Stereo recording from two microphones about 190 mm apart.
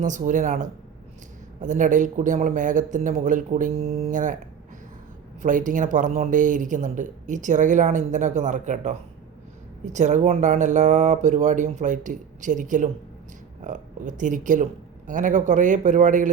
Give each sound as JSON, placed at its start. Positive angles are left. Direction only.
{"t": 0.0, "sound": "speech", "side_deg": -40}
{"t": 5.4, "sound": "speech", "side_deg": -45}